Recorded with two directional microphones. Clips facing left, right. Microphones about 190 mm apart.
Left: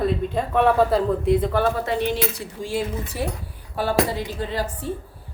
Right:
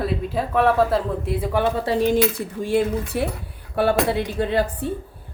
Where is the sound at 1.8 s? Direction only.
40° right (ahead or behind).